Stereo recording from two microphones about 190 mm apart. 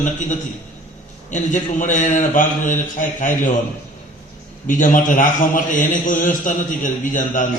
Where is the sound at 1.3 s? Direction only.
40° left (ahead or behind).